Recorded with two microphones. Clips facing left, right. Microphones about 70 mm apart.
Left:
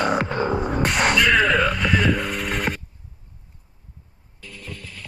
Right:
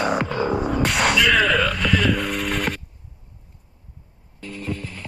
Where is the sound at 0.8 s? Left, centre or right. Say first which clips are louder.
Left 1 dB; centre.